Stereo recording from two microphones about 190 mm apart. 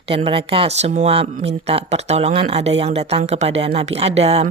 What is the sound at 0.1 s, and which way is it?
Speech, 30° right (ahead or behind).